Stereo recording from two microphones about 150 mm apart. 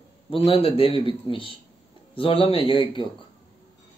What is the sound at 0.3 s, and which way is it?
A man's voice, 40° left (ahead or behind).